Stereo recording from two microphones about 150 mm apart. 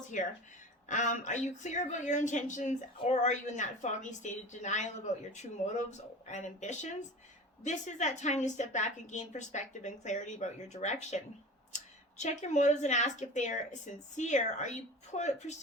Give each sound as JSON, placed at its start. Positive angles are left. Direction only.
{"t": 0.1, "sound": "speech", "side_deg": 55}